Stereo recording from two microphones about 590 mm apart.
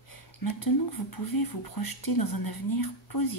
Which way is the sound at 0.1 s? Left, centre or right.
Left.